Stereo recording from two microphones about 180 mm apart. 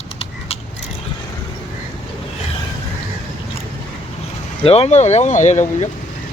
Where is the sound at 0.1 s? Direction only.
35° left (ahead or behind).